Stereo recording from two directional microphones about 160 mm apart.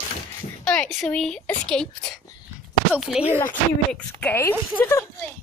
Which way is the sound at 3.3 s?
10° left (ahead or behind).